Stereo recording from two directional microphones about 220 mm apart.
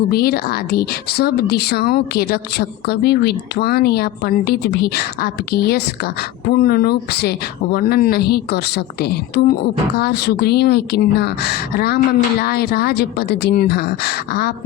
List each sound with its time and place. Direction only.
0.1 s a woman's voice: 45° left (ahead or behind)